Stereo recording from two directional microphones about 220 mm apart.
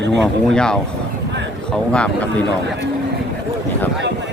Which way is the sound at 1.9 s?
5° left (ahead or behind).